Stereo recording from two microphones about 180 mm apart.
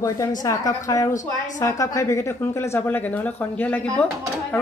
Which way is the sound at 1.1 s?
45° left (ahead or behind).